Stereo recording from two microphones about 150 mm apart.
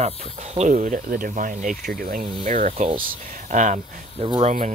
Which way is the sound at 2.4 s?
60° right (ahead or behind).